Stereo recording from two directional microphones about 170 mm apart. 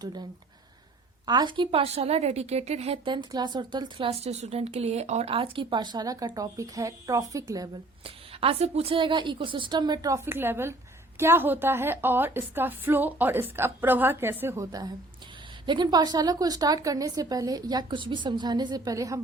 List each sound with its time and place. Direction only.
0.0 s a woman's voice: 25° right (ahead or behind)
8.0 s a woman's voice: 35° right (ahead or behind); by 19.2 s 20° right (ahead or behind)